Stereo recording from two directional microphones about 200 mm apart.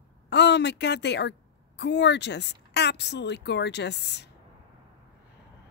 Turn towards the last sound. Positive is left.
turn(degrees=55)  # may be behind; listen again after turning